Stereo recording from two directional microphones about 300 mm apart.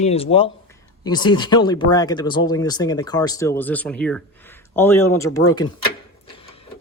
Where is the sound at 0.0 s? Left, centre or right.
Centre.